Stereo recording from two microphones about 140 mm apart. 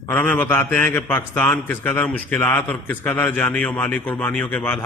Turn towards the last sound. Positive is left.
turn(degrees=10)  # may be behind; listen again after turning